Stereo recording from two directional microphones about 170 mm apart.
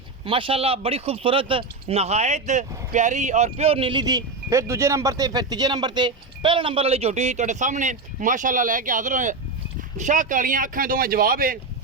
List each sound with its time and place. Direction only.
0.3 s speech: 30° right (ahead or behind); by 11.6 s 55° right (ahead or behind)